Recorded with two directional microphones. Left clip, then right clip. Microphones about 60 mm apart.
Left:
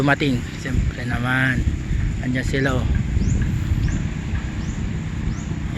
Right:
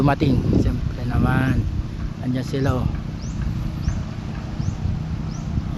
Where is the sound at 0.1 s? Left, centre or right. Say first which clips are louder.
Even; right.